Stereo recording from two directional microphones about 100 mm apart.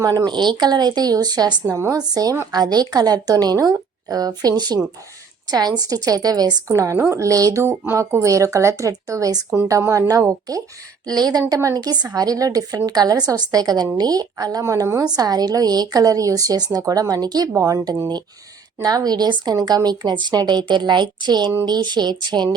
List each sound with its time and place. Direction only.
0.3 s speech: 50° right (ahead or behind)
1.6 s a woman's voice: 30° right (ahead or behind); by 22.4 s 45° right (ahead or behind)